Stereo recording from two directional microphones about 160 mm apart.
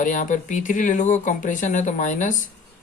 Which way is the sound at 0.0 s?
50° left (ahead or behind).